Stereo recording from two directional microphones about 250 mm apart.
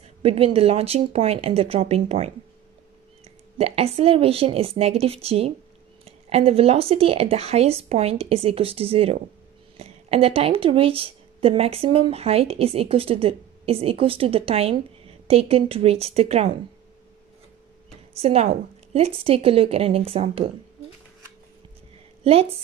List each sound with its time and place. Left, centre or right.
0.2 s a woman's voice: right
3.5 s a woman's voice: right
18.2 s a woman's voice: right
22.2 s a woman's voice: right